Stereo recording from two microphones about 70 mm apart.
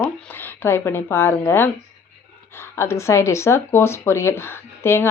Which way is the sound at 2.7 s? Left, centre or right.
Left.